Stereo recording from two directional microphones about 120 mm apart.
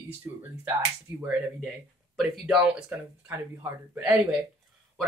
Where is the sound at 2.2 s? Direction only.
5° right (ahead or behind).